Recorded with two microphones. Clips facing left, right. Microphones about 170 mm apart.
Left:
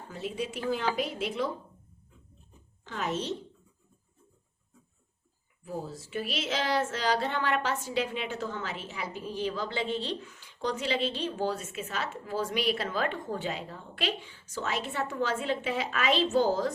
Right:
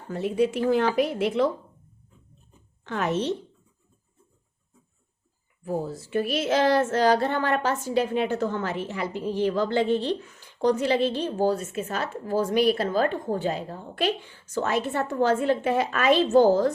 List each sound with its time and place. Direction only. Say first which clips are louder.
0.1 s a woman's voice: right 11 dB; 55° right (ahead or behind)
2.8 s a woman's voice: right 7 dB; 60° right (ahead or behind)
5.6 s a sound: right 8 dB; 60° right (ahead or behind)